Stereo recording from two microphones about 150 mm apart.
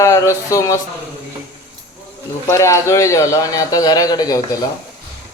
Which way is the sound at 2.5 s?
20° left (ahead or behind).